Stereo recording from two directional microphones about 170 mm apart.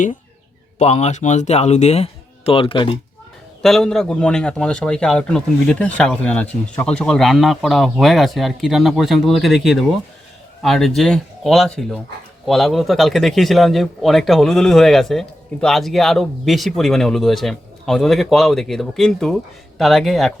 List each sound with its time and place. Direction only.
0.8 s speech: 40° left (ahead or behind)
3.6 s a man's voice: centre (ahead or behind)